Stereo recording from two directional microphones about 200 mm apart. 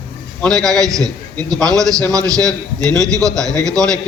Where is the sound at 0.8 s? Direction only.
15° right (ahead or behind).